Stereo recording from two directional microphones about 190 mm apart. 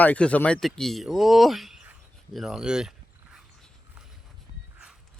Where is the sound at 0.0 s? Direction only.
5° left (ahead or behind).